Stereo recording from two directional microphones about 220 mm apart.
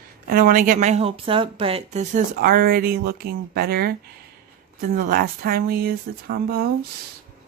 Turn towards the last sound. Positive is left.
turn(degrees=-45)  # may be behind; listen again after turning